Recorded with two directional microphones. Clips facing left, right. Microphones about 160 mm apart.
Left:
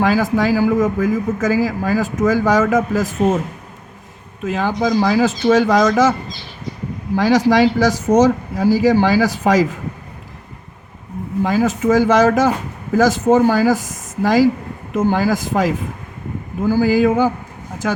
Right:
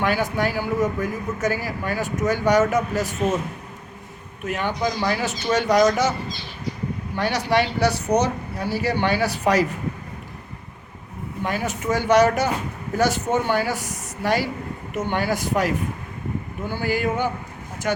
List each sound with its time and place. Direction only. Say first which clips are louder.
0.0 s a man's voice: left 6 dB; 90° left
4.4 s a man's voice: left 6 dB; 90° left
7.2 s a man's voice: left 8 dB; 90° left
11.4 s a man's voice: left 8 dB; 90° left